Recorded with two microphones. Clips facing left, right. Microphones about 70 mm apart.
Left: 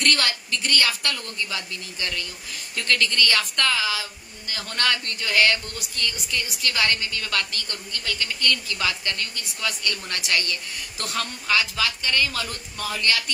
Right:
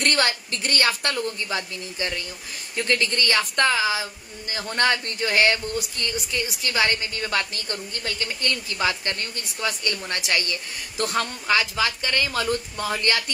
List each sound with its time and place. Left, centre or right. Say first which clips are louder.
0.0 s a woman's voice: right 1 dB; right
9.7 s a woman's voice: right 2 dB; right